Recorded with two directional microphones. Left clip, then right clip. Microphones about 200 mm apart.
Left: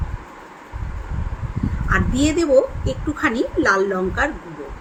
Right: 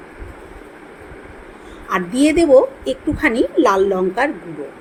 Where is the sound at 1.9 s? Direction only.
5° right (ahead or behind).